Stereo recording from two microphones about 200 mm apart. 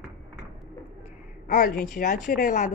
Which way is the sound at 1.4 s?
45° left (ahead or behind).